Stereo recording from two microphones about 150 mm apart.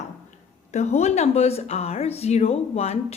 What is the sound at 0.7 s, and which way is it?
Speech, 45° left (ahead or behind).